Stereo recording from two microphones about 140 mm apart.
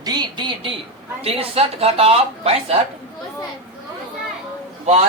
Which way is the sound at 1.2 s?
45° right (ahead or behind).